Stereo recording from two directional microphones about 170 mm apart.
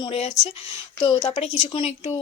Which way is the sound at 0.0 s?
35° left (ahead or behind).